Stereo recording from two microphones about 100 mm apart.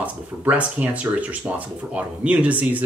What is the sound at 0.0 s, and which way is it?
Speech, 15° right (ahead or behind).